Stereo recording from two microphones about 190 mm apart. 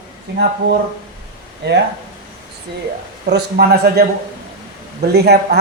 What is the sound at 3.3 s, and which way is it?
Speech, 55° right (ahead or behind).